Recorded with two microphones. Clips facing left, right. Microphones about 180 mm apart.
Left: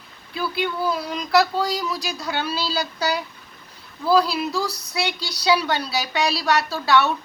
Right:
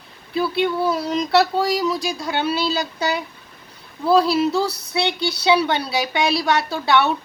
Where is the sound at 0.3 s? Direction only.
30° right (ahead or behind).